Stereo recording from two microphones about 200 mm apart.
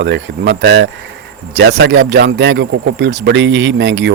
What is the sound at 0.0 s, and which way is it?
Speech, 65° right (ahead or behind).